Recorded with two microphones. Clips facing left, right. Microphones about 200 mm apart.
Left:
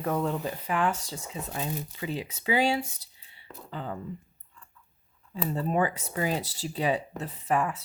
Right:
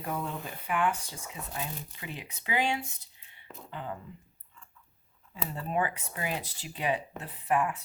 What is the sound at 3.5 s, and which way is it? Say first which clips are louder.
Speech: left 2 dB; 5° right (ahead or behind).